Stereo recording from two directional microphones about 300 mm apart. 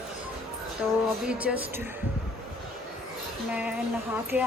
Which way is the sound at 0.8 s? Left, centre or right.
Centre.